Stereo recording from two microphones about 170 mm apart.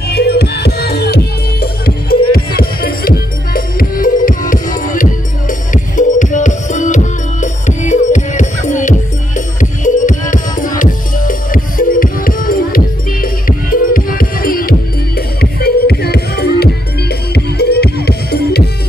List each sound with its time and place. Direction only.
0.1 s music: 70° left (ahead or behind)